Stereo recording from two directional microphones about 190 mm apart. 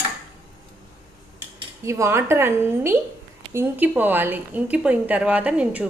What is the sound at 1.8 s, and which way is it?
A woman's voice, 15° right (ahead or behind).